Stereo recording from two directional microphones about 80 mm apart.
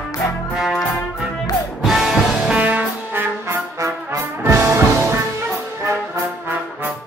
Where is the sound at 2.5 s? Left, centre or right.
Centre.